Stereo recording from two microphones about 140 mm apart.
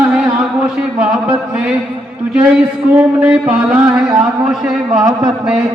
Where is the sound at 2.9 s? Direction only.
10° right (ahead or behind).